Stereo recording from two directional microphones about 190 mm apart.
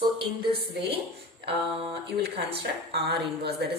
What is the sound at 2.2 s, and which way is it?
Speech, 60° right (ahead or behind).